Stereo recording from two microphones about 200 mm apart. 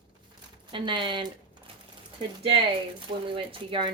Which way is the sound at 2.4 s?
30° right (ahead or behind).